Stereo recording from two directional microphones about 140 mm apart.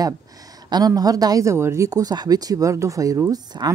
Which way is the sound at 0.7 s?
30° right (ahead or behind).